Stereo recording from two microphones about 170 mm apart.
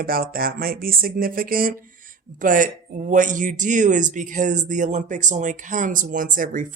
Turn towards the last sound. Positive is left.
turn(degrees=-50)  # may be behind; listen again after turning